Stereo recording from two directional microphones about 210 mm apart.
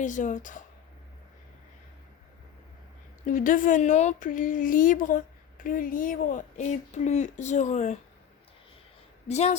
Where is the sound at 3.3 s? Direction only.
40° left (ahead or behind).